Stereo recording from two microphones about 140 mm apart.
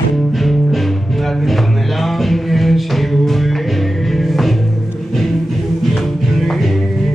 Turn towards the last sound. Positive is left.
turn(degrees=0)  # may be behind; listen again after turning